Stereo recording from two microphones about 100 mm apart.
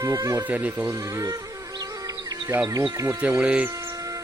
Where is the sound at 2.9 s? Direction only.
30° right (ahead or behind).